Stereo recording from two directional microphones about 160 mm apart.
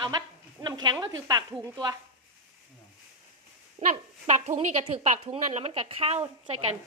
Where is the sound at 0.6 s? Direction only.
25° right (ahead or behind).